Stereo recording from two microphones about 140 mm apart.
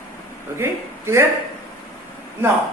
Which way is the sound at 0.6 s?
20° right (ahead or behind).